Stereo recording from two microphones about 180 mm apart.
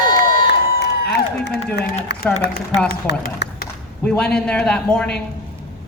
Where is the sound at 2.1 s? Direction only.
70° left (ahead or behind).